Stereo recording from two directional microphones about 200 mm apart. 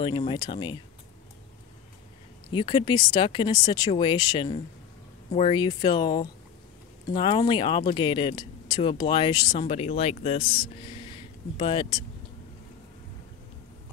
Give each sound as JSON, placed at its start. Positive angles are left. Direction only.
{"t": 0.0, "sound": "speech", "side_deg": 25}
{"t": 2.5, "sound": "speech", "side_deg": 25}